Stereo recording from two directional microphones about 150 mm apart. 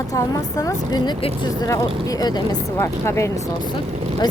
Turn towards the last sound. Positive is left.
turn(degrees=20)  # may be behind; listen again after turning